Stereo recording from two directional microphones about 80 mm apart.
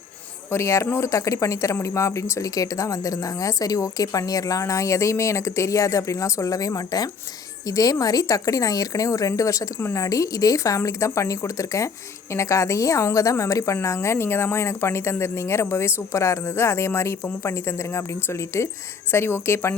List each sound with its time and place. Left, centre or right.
0.5 s speech: left